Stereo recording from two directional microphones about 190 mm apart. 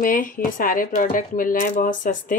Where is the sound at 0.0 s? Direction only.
45° left (ahead or behind).